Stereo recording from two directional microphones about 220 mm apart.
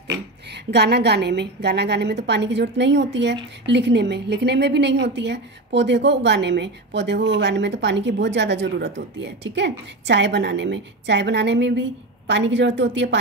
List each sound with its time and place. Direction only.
0.1 s a woman's voice: 50° right (ahead or behind)